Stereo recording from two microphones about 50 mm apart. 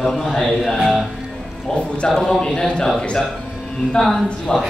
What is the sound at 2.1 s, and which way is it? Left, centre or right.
Speech, centre.